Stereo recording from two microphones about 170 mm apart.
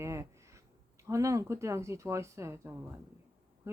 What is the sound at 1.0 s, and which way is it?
Speech, 15° right (ahead or behind).